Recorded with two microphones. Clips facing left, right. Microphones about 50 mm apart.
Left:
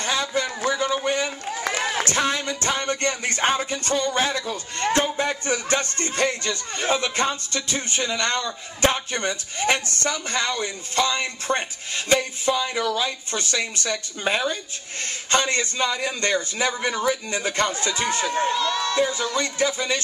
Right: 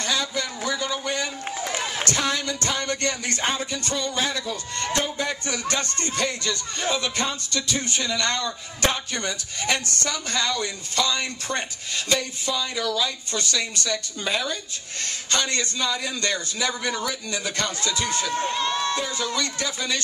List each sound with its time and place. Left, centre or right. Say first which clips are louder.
0.0 s a sound: left 2 dB; left
1.6 s run: left 4 dB; left
2.0 s music: left 2 dB; left
12.1 s speech: left 5 dB; left
15.3 s music: left 4 dB; left
18.5 s speech: left 1 dB; right
18.9 s music: left 4 dB; left